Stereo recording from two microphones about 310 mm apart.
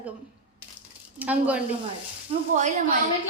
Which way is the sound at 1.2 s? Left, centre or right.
Centre.